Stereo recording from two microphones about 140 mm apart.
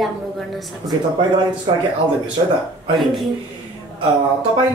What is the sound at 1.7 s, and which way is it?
Speech, 35° right (ahead or behind).